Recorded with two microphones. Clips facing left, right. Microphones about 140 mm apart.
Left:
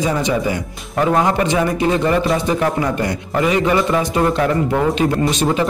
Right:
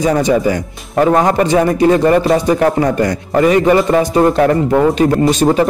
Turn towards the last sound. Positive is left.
turn(degrees=-40)  # may be behind; listen again after turning